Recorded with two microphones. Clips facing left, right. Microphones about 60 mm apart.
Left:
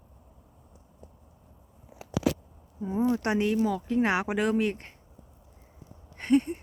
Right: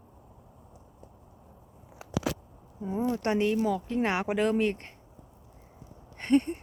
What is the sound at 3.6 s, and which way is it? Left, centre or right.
Speech, centre.